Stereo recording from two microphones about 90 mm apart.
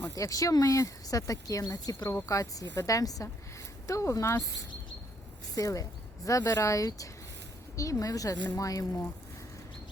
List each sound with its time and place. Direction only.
0.2 s speech: 40° left (ahead or behind)
5.5 s speech: 40° left (ahead or behind)